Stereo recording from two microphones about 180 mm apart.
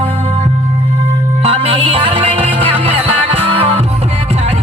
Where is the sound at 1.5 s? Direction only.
30° right (ahead or behind).